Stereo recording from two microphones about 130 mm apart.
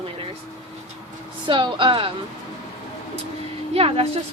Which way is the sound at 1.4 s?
40° right (ahead or behind).